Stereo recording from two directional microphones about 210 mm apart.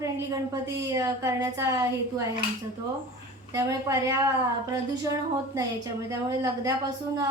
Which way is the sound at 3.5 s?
15° right (ahead or behind).